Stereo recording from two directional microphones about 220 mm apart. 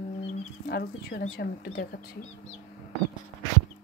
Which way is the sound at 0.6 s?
45° left (ahead or behind).